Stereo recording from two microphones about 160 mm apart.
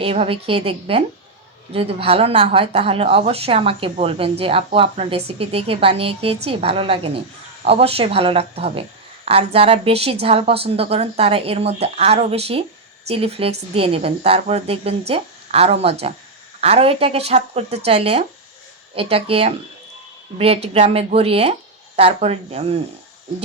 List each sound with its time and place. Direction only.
0.0 s a woman's voice: 35° right (ahead or behind)